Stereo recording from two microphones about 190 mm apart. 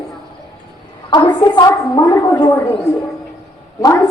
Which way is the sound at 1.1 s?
20° left (ahead or behind).